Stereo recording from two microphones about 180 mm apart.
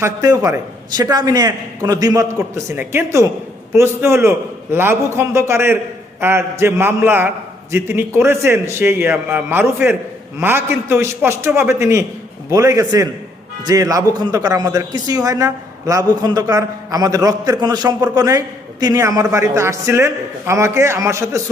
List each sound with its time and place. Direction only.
0.0 s a man's voice: 15° right (ahead or behind)